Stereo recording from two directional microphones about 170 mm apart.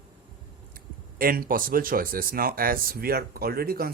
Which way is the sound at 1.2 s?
60° right (ahead or behind).